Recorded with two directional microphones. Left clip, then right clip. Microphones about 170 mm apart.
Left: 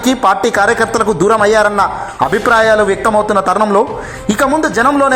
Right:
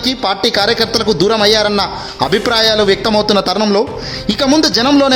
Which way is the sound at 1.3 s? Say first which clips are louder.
Left 3 dB; 35° right (ahead or behind).